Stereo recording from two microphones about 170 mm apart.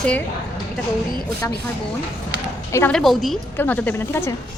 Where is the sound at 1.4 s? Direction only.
15° left (ahead or behind).